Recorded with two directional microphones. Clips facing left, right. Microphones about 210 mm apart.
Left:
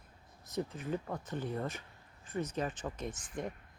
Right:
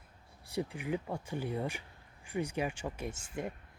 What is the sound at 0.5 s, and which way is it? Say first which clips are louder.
Speech: right 1 dB; 10° right (ahead or behind).